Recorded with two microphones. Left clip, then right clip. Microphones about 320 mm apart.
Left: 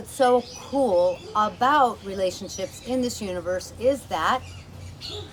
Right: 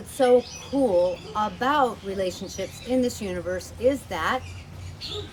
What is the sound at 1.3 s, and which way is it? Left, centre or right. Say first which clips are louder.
A woman's voice: left 3 dB; centre.